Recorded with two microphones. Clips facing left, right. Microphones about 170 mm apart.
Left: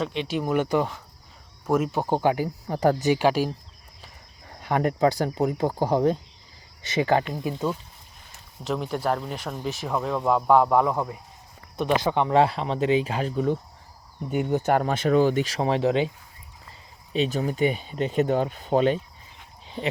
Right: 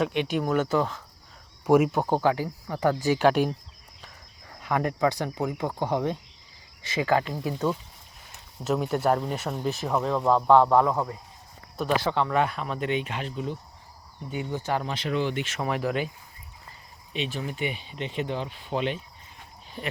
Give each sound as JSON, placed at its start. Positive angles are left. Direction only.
{"t": 0.0, "sound": "speech", "side_deg": -5}
{"t": 0.4, "sound": "speech", "side_deg": 10}
{"t": 1.6, "sound": "speech", "side_deg": -10}
{"t": 2.0, "sound": "speech", "side_deg": 20}
{"t": 3.0, "sound": "speech", "side_deg": 15}
{"t": 4.4, "sound": "speech", "side_deg": 30}
{"t": 8.6, "sound": "speech", "side_deg": -5}
{"t": 12.4, "sound": "speech", "side_deg": 30}
{"t": 17.1, "sound": "speech", "side_deg": 40}